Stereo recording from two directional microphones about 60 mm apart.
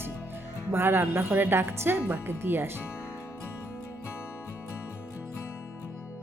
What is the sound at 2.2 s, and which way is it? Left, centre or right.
Speech, right.